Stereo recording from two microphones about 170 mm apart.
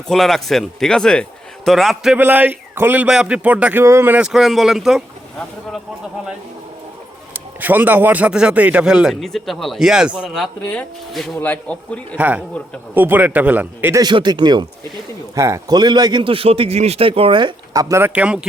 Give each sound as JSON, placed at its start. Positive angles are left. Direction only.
{"t": 0.1, "sound": "a man's voice", "side_deg": 0}
{"t": 7.3, "sound": "a man's voice", "side_deg": -10}
{"t": 12.1, "sound": "speech", "side_deg": -10}
{"t": 14.0, "sound": "a man's voice", "side_deg": -25}